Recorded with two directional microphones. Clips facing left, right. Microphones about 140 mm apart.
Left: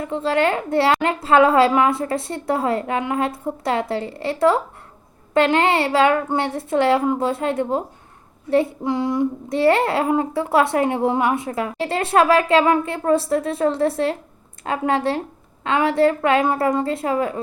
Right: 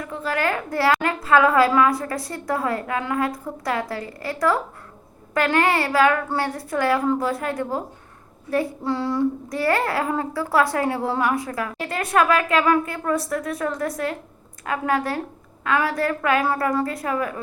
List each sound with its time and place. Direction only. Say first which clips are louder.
0.0 s speech: left 5 dB; 25° left (ahead or behind)